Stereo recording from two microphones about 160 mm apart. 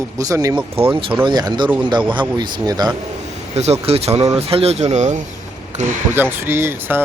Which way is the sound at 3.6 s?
40° right (ahead or behind).